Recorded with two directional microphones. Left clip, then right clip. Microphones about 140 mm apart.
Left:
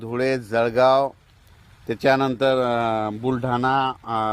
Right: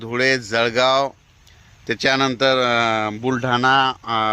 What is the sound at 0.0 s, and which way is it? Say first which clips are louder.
Speech: right 4 dB; 15° right (ahead or behind).